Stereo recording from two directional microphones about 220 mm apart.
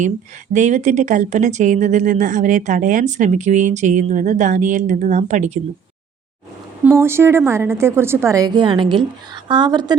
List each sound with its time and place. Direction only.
0.5 s speech: 30° right (ahead or behind)
6.8 s a woman's voice: 10° right (ahead or behind)